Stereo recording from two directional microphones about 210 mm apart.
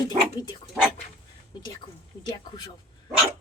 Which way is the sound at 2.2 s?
20° left (ahead or behind).